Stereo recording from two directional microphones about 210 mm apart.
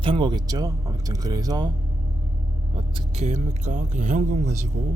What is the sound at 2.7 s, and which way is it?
Speech, 30° right (ahead or behind).